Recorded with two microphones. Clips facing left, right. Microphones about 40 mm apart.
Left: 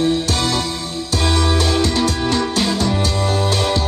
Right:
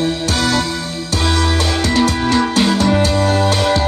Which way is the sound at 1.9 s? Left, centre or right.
Right.